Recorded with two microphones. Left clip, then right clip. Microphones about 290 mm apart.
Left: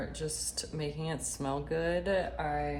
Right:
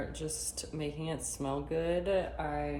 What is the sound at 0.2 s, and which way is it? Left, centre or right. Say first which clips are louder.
Speech: left 2 dB; left.